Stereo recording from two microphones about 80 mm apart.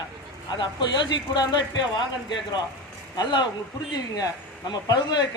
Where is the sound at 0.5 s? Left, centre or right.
Left.